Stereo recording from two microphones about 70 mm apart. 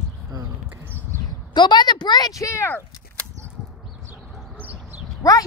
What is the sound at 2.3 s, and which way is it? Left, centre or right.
Speech, left.